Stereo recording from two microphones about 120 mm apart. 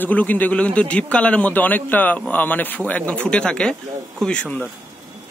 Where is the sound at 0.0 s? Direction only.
15° left (ahead or behind).